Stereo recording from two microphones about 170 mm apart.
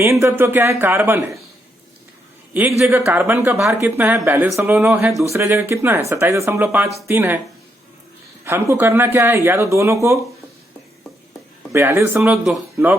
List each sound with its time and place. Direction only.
0.0 s speech: 15° right (ahead or behind)
2.5 s speech: 10° right (ahead or behind)
8.4 s speech: 15° right (ahead or behind)
11.7 s speech: 15° right (ahead or behind)